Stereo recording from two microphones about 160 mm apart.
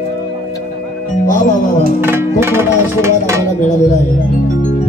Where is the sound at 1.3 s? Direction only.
55° left (ahead or behind).